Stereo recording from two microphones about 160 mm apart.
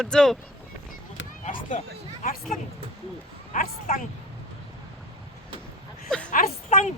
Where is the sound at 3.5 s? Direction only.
50° left (ahead or behind).